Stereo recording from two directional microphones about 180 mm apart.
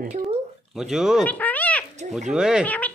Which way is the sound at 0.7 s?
Centre (ahead or behind).